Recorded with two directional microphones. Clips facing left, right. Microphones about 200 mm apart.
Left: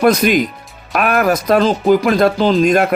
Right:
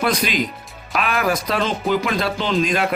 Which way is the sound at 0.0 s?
45° left (ahead or behind).